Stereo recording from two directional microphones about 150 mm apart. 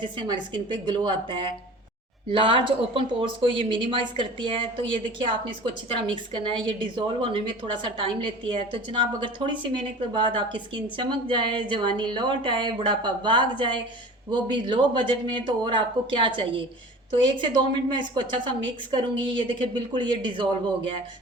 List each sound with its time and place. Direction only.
0.0 s a woman's voice: 35° right (ahead or behind)